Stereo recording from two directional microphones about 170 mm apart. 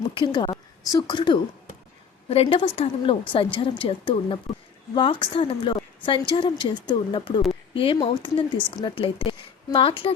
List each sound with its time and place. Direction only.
0.2 s a woman's voice: 30° left (ahead or behind)